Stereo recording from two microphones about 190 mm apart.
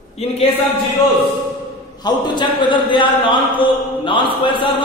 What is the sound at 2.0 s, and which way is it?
A man's voice, 25° left (ahead or behind).